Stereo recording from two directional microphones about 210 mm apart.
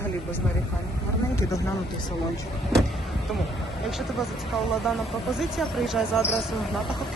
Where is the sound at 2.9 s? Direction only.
Centre (ahead or behind).